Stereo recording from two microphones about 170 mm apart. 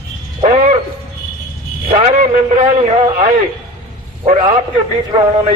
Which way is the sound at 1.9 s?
40° right (ahead or behind).